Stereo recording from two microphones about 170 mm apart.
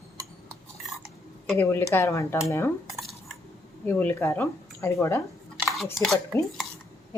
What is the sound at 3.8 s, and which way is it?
Speech, 10° left (ahead or behind).